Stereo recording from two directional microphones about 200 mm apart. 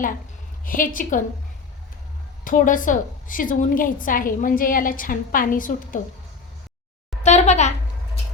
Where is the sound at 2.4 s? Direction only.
40° left (ahead or behind).